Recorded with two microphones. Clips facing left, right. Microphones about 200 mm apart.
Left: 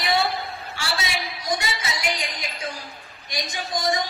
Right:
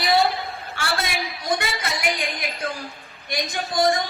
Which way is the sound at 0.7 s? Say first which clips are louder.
Right 3 dB; 55° right (ahead or behind).